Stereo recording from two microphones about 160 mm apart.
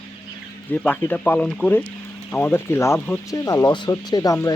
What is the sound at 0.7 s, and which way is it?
Speech, 10° left (ahead or behind).